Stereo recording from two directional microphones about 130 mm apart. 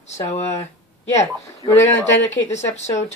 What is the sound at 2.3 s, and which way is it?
Speech, 60° left (ahead or behind).